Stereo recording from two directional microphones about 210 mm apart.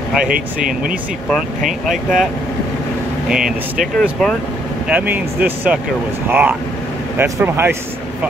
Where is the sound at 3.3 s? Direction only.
5° right (ahead or behind).